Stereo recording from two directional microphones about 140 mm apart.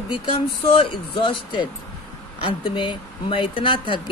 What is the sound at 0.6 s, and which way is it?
Speech, 40° left (ahead or behind).